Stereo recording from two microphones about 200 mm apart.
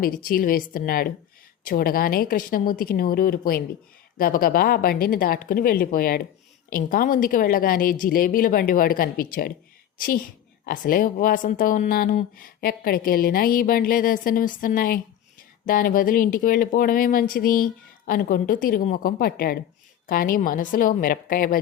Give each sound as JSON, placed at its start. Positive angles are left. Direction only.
{"t": 0.0, "sound": "speech", "side_deg": 45}